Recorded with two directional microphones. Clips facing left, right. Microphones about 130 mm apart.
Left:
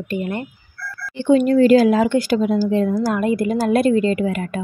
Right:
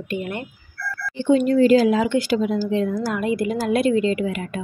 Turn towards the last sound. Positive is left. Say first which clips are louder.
# left 3 dB
turn(degrees=45)  # may be behind; listen again after turning